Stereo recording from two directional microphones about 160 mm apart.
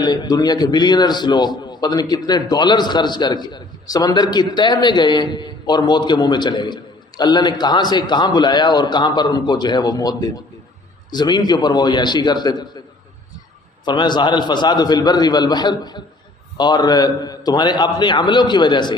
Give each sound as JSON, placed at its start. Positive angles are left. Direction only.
{"t": 0.0, "sound": "a man's voice", "side_deg": 25}
{"t": 13.8, "sound": "a man's voice", "side_deg": 30}